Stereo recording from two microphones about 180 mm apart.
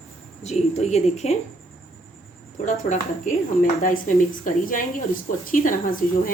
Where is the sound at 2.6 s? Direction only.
45° left (ahead or behind).